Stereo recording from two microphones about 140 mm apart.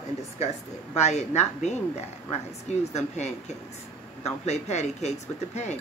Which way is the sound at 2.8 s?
50° left (ahead or behind).